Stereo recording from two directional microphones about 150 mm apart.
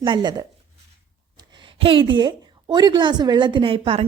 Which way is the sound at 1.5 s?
35° right (ahead or behind).